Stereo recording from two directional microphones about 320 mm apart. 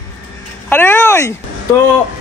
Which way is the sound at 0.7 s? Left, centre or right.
Centre.